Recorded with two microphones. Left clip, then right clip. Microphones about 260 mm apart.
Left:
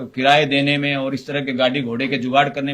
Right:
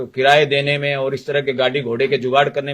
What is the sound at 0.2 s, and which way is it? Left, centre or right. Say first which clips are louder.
Speech: right 2 dB; right.